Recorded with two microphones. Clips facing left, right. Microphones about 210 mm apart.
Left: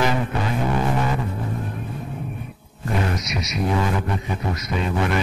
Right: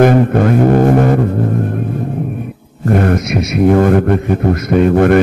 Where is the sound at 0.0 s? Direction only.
55° right (ahead or behind).